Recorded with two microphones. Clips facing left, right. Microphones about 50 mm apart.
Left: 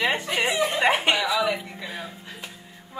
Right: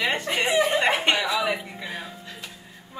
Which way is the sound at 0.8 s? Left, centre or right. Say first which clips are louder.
Left 1 dB; centre.